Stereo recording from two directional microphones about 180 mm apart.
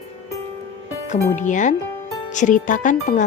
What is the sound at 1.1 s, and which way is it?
Speech, 45° left (ahead or behind).